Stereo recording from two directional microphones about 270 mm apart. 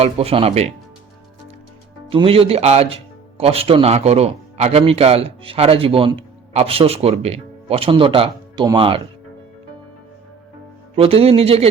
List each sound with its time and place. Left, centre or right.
0.0 s speech: right
2.0 s speech: right
10.9 s speech: right